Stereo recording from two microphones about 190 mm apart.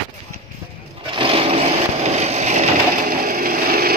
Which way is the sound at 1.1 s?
30° right (ahead or behind).